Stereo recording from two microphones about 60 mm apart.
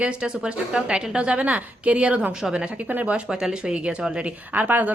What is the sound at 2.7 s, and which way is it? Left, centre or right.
Speech, right.